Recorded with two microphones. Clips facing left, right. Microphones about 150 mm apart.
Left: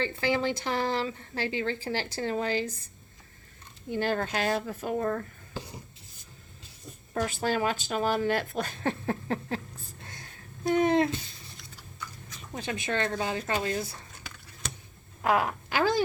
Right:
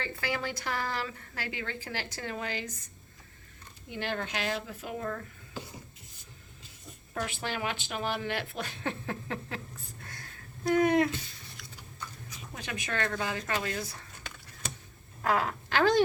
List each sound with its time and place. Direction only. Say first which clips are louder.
0.0 s a woman's voice: left 7 dB; 25° left (ahead or behind); by 5.2 s 45° left (ahead or behind)
7.1 s speech: left 6 dB; 40° left (ahead or behind)
10.0 s a sound: left 1 dB; 25° left (ahead or behind)
12.5 s a woman's voice: left 4 dB; 30° left (ahead or behind)
15.2 s speech: left 3 dB; 15° left (ahead or behind)
15.8 s speech: right 2 dB; centre (ahead or behind)